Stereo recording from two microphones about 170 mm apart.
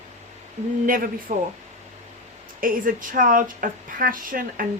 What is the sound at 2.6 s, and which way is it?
Speech, 55° right (ahead or behind).